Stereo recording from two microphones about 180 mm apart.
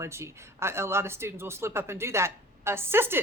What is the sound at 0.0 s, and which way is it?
Speech, 15° right (ahead or behind).